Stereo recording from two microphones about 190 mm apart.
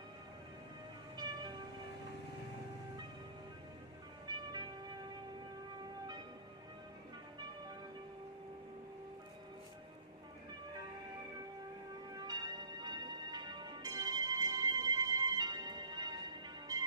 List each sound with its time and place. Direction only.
1.1 s music: 20° right (ahead or behind)
4.5 s music: 20° right (ahead or behind)
12.1 s music: 20° right (ahead or behind)